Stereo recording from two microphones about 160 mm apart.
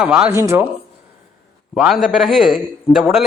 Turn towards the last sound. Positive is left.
turn(degrees=-5)  # may be behind; listen again after turning